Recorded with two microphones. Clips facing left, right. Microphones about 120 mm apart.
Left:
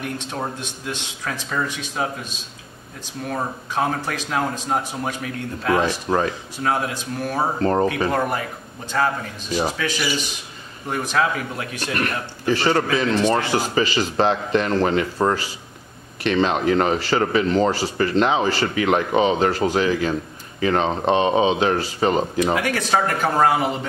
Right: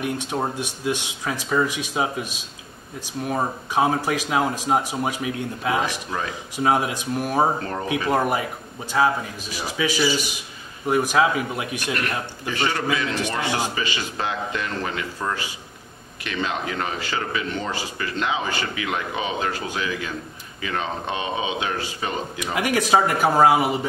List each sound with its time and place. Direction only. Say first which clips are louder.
0.0 s speech: right 2 dB; 10° right (ahead or behind)
12.4 s a man's voice: left 5 dB; 35° left (ahead or behind)
22.6 s speech: right 2 dB; 10° right (ahead or behind)